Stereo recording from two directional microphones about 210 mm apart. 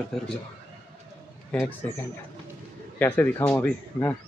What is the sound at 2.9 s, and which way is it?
Speech, 10° left (ahead or behind).